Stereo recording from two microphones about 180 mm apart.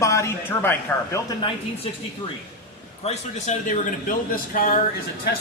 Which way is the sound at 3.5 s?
40° left (ahead or behind).